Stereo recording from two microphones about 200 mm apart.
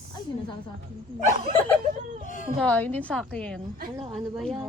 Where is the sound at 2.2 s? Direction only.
40° left (ahead or behind).